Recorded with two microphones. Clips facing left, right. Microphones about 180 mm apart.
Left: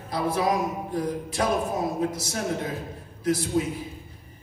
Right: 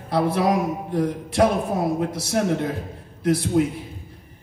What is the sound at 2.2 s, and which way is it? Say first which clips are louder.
A man's voice: right 7 dB; 60° right (ahead or behind).